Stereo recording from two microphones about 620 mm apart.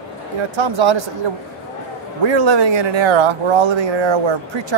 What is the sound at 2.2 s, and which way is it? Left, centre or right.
Speech, right.